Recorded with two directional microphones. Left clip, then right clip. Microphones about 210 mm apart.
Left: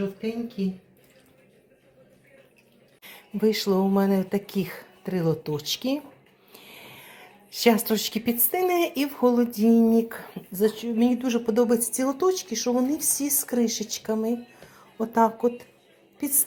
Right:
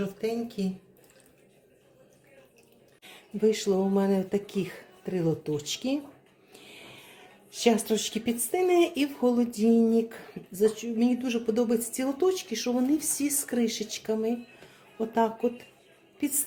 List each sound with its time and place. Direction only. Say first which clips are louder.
0.2 s speech: right 1 dB; 50° right (ahead or behind)
3.0 s speech: left 1 dB; centre (ahead or behind)